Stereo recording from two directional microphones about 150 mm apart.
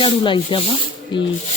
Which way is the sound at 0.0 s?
35° left (ahead or behind).